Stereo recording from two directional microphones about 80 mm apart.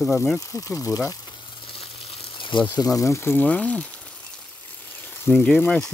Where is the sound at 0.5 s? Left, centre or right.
Left.